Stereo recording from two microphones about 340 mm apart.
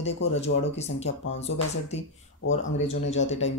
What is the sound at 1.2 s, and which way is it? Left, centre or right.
Speech, left.